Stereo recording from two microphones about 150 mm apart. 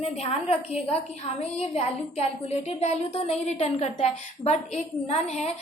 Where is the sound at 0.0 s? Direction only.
45° left (ahead or behind).